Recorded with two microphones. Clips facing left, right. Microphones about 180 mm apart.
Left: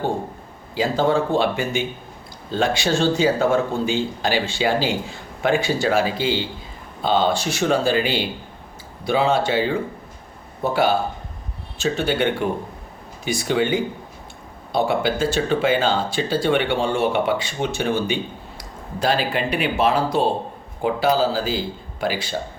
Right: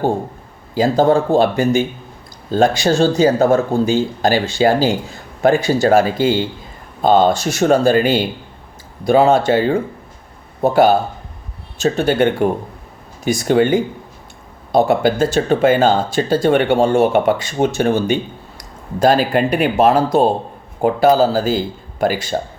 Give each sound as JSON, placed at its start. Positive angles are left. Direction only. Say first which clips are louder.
{"t": 0.7, "sound": "speech", "louder": "right 6 dB", "side_deg": -40}